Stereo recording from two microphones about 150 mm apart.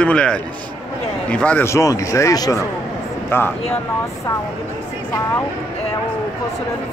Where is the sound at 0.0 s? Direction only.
5° left (ahead or behind).